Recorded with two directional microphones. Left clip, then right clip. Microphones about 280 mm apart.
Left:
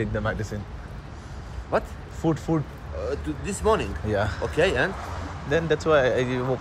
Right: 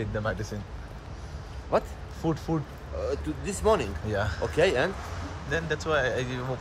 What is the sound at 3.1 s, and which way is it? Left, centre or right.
Speech, right.